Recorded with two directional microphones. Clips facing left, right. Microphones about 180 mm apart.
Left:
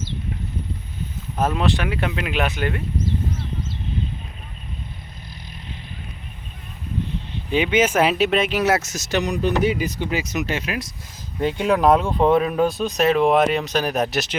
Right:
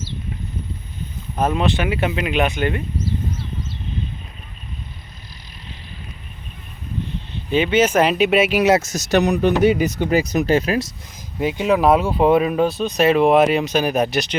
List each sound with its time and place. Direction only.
1.5 s speech: centre (ahead or behind)
7.5 s speech: 10° left (ahead or behind)
8.1 s speech: 5° right (ahead or behind)
8.8 s speech: 35° right (ahead or behind)
9.1 s speech: 45° right (ahead or behind)
11.3 s speech: 5° right (ahead or behind)